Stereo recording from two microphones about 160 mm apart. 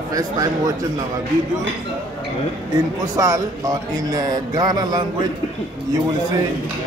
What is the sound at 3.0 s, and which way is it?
Speech, 20° right (ahead or behind).